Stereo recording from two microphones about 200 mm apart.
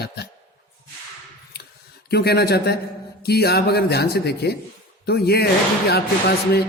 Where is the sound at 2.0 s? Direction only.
50° left (ahead or behind).